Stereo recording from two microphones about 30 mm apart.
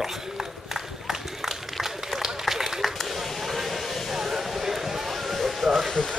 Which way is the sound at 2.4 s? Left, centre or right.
Centre.